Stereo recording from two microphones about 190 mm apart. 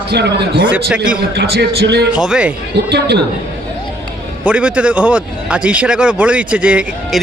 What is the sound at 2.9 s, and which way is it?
Speech, 60° right (ahead or behind).